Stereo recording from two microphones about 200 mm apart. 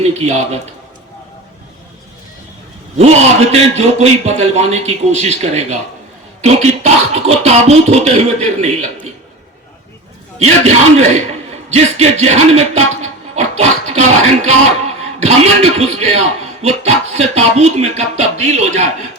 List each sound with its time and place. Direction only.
0.0 s a man's voice: 35° right (ahead or behind)
3.0 s speech: 35° right (ahead or behind)
10.3 s speech: 35° right (ahead or behind)